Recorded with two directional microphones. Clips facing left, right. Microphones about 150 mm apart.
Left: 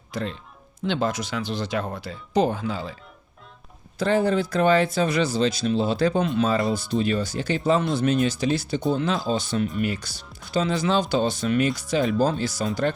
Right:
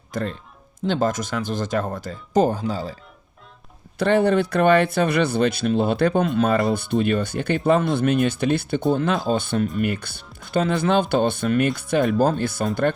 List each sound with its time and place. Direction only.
0.1 s speech: 50° right (ahead or behind)
3.9 s speech: 65° right (ahead or behind)